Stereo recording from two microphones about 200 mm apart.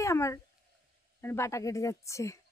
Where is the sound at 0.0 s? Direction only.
15° left (ahead or behind).